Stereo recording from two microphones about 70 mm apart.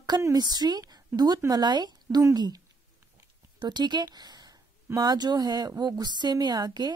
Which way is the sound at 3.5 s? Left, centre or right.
Right.